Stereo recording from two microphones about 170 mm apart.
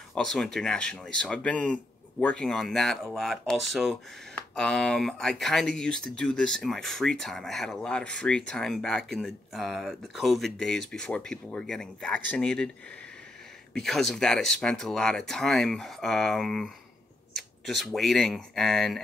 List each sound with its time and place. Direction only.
0.1 s speech: 5° left (ahead or behind)
13.7 s speech: centre (ahead or behind)